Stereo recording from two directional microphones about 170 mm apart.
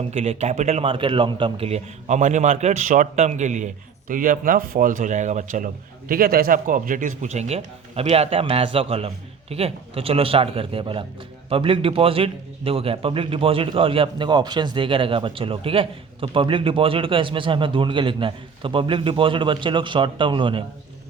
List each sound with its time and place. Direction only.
0.0 s a man's voice: 35° right (ahead or behind)